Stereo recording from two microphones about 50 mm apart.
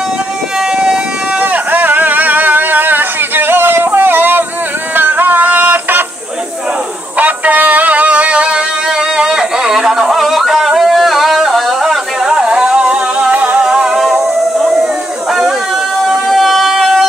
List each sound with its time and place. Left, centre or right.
1.4 s a sound: right
4.9 s music: right
7.2 s music: right; by 11.7 s centre
12.2 s music: centre
13.3 s music: right
13.6 s music: centre
14.6 s a sound: centre
16.3 s music: centre